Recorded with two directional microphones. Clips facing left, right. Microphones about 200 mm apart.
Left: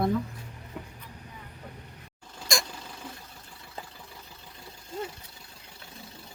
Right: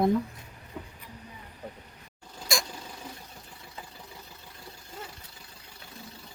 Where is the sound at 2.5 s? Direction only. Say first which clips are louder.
Even; 5° right (ahead or behind).